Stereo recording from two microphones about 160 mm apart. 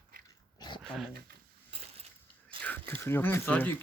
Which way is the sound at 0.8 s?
5° right (ahead or behind).